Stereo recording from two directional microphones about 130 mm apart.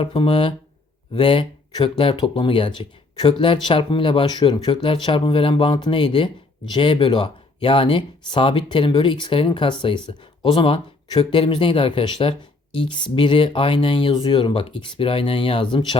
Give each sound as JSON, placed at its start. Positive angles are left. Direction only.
{"t": 0.0, "sound": "speech", "side_deg": 45}